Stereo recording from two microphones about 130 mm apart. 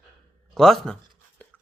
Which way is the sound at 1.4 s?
10° left (ahead or behind).